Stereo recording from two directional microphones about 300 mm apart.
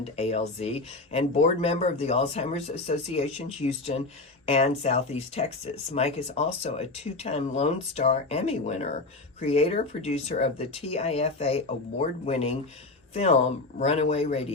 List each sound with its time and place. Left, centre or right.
0.0 s speech: left
13.7 s speech: left